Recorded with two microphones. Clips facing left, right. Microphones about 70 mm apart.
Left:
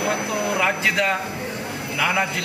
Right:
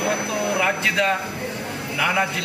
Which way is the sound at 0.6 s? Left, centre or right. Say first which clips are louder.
Even; centre.